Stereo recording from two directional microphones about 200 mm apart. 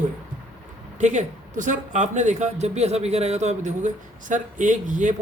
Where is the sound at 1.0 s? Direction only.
35° right (ahead or behind).